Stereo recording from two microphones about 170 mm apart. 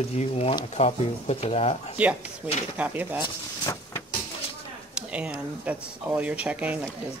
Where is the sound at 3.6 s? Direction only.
20° left (ahead or behind).